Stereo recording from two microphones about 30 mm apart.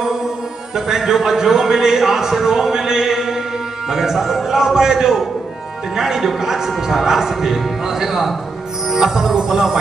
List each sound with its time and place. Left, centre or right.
0.7 s a man's voice: centre